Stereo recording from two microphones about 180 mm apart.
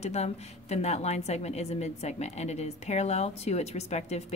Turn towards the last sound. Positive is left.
turn(degrees=40)  # may be behind; listen again after turning